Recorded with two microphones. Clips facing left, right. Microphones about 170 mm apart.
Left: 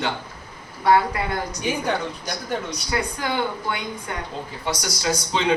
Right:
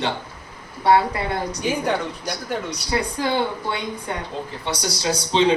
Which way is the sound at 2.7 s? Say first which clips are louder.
Right 2 dB; 30° right (ahead or behind).